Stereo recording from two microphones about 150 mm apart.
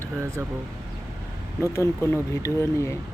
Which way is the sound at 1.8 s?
20° left (ahead or behind).